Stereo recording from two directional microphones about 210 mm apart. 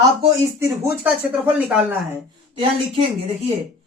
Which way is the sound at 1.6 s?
5° right (ahead or behind).